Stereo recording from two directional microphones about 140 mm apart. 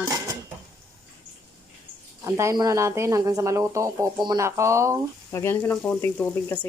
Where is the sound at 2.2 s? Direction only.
20° right (ahead or behind).